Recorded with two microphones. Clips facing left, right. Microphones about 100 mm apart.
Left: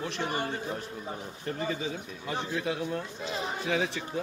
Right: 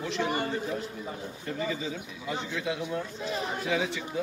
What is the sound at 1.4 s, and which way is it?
A man's voice, 45° left (ahead or behind).